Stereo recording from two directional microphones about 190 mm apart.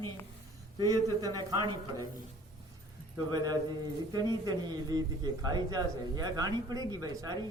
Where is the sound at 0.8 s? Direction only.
20° right (ahead or behind).